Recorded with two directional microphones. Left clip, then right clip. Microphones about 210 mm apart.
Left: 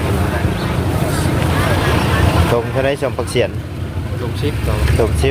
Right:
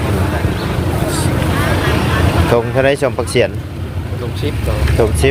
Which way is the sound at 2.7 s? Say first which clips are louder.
Right 4 dB; 25° right (ahead or behind).